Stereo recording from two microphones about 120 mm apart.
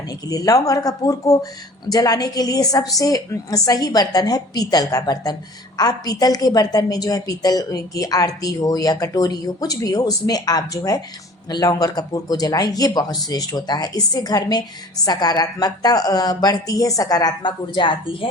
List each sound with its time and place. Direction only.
0.3 s a woman's voice: 30° left (ahead or behind); by 18.3 s 45° left (ahead or behind)